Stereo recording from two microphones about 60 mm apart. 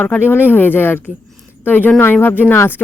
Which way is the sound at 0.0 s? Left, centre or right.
Left.